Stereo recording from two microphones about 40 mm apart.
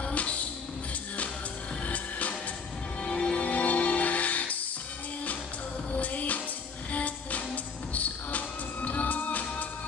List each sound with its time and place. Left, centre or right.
0.1 s music: left
1.9 s music: left
3.0 s music: left
5.9 s music: left